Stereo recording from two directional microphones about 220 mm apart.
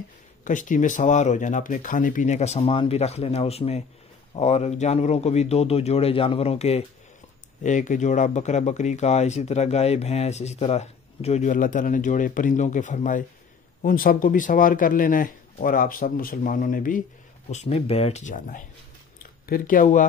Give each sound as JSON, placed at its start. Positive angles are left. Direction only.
{"t": 0.4, "sound": "speech", "side_deg": 35}